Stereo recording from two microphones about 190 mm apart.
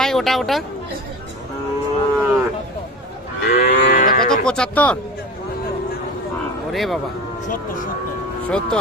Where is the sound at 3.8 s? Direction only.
50° left (ahead or behind).